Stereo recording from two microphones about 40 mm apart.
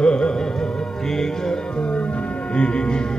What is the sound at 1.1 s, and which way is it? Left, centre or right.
Music, centre.